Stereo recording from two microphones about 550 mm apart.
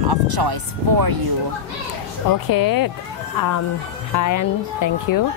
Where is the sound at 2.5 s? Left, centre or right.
Left.